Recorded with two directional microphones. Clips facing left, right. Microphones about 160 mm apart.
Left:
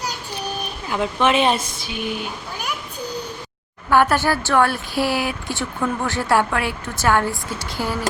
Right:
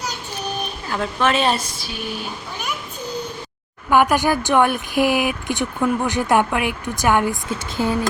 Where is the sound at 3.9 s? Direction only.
15° right (ahead or behind).